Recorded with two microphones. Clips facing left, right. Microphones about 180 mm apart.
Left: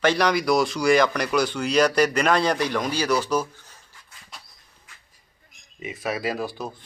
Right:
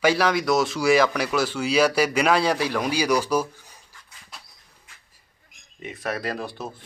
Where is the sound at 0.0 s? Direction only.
5° right (ahead or behind).